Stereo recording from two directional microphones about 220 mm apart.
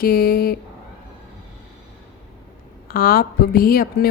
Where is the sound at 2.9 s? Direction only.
40° left (ahead or behind).